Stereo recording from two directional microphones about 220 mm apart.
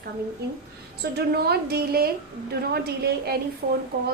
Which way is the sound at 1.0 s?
45° right (ahead or behind).